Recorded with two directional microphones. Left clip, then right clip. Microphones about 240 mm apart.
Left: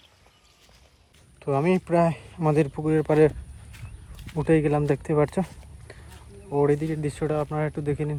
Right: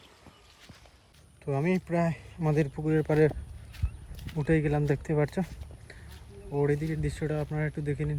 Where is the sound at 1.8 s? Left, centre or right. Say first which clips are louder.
Left 8 dB; centre.